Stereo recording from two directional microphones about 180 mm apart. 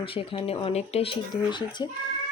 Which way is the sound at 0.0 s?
30° left (ahead or behind).